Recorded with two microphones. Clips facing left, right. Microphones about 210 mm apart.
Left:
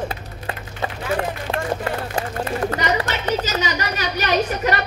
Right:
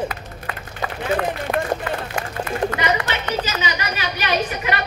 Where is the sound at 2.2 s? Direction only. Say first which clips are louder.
Even; 35° left (ahead or behind).